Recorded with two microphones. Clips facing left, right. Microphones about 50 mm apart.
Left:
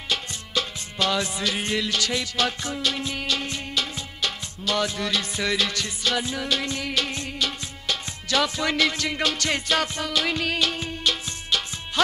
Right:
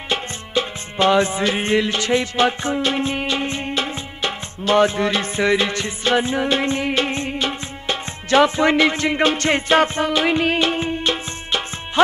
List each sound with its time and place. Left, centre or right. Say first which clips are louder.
0.1 s music: right 5 dB; right